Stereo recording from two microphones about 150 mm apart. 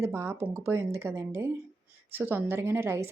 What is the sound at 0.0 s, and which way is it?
A woman's voice, 20° right (ahead or behind).